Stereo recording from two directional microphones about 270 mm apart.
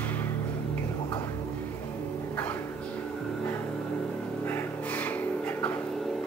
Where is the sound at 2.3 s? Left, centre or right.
Centre.